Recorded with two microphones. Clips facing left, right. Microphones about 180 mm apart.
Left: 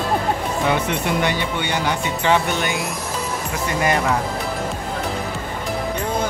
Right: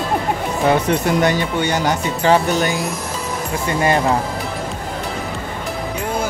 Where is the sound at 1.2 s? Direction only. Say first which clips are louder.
Right 5 dB; 40° right (ahead or behind).